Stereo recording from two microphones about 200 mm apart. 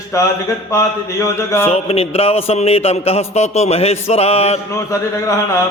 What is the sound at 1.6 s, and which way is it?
A man's voice, 30° left (ahead or behind).